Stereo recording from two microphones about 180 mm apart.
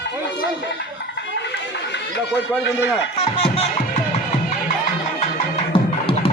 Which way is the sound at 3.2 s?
30° left (ahead or behind).